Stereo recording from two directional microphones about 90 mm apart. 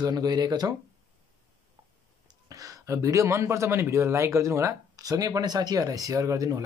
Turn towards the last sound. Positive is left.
turn(degrees=-40)  # may be behind; listen again after turning